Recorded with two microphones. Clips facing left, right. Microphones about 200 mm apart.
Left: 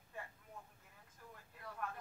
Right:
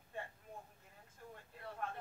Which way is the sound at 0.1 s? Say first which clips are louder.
Right 4 dB; 30° right (ahead or behind).